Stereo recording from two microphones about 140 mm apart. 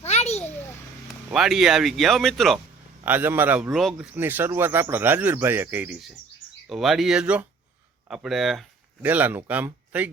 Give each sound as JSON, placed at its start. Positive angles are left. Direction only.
{"t": 0.0, "sound": "a sound", "side_deg": 50}
{"t": 1.0, "sound": "speech", "side_deg": 0}
{"t": 3.0, "sound": "speech", "side_deg": -15}
{"t": 3.7, "sound": "speech", "side_deg": 0}
{"t": 6.7, "sound": "speech", "side_deg": 0}
{"t": 9.0, "sound": "speech", "side_deg": -15}